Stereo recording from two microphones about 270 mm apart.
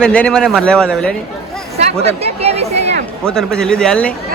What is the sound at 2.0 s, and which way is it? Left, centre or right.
Speech, right.